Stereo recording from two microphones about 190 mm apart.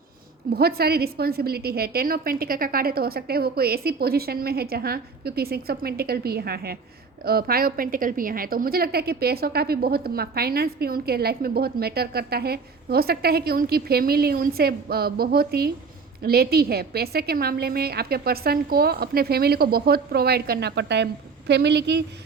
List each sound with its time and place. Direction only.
0.5 s a woman's voice: 55° right (ahead or behind)